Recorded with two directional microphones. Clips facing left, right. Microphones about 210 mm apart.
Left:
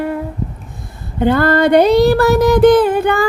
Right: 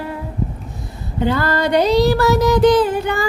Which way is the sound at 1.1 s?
55° left (ahead or behind).